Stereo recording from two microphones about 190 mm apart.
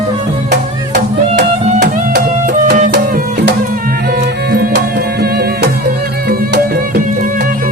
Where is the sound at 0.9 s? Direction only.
50° right (ahead or behind).